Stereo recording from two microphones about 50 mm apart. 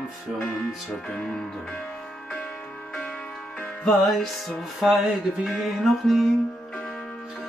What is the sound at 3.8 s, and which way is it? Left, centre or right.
Music, centre.